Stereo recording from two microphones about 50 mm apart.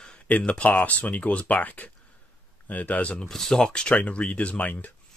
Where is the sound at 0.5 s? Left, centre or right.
Left.